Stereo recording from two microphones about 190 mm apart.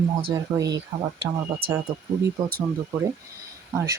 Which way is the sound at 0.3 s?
20° right (ahead or behind).